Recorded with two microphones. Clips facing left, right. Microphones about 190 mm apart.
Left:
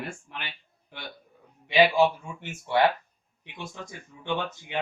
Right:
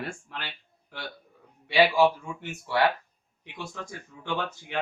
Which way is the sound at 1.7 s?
20° left (ahead or behind).